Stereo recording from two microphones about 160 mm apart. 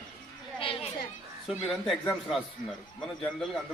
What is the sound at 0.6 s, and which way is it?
Children playing, 35° left (ahead or behind).